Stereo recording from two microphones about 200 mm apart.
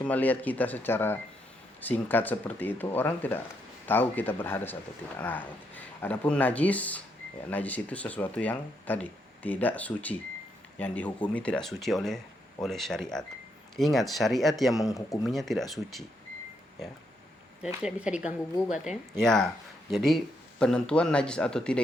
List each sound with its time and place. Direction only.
0.0 s speech: 10° left (ahead or behind)
14.9 s speech: 15° left (ahead or behind)
15.3 s speech: centre (ahead or behind)
17.8 s speech: 5° right (ahead or behind)